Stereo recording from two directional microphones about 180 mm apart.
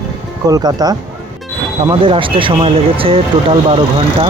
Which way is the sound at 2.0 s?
30° right (ahead or behind).